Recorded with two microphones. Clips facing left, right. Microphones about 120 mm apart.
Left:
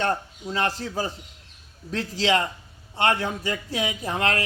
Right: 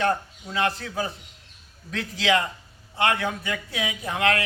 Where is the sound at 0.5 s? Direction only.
35° left (ahead or behind).